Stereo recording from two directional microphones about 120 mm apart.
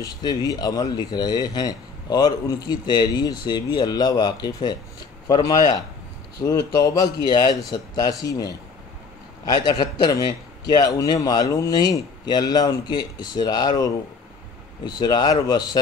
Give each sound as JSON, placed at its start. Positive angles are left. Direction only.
{"t": 0.0, "sound": "speech", "side_deg": 35}
{"t": 14.9, "sound": "speech", "side_deg": 35}